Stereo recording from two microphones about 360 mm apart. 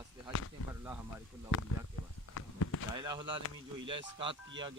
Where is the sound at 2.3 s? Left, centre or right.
Left.